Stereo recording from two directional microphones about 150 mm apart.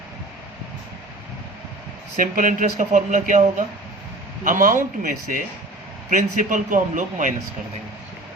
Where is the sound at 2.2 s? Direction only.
65° right (ahead or behind).